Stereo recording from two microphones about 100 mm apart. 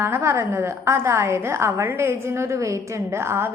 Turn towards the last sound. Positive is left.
turn(degrees=-25)  # may be behind; listen again after turning